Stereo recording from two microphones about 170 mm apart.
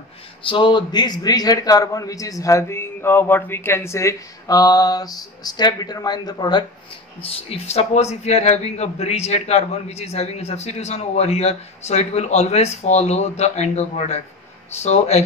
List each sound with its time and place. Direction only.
0.4 s a man's voice: 30° left (ahead or behind)
7.2 s speech: 35° left (ahead or behind)